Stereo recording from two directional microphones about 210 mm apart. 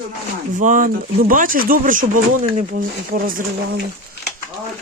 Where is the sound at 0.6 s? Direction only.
40° right (ahead or behind).